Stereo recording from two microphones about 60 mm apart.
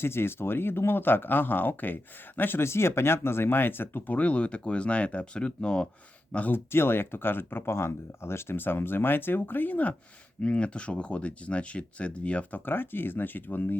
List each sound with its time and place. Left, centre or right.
0.0 s speech: left; by 5.9 s centre
6.5 s speech: left